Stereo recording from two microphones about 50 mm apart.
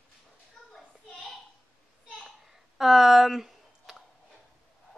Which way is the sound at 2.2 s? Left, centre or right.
Centre.